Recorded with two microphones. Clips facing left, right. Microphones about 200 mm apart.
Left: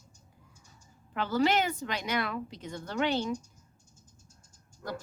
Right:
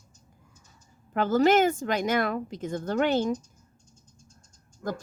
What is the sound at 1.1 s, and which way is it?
Speech, 45° right (ahead or behind).